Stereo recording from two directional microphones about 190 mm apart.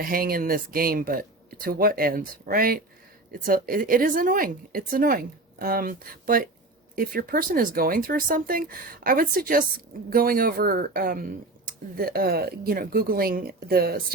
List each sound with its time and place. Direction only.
0.0 s speech: 50° right (ahead or behind)